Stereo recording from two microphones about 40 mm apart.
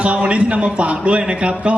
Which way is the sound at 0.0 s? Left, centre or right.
Right.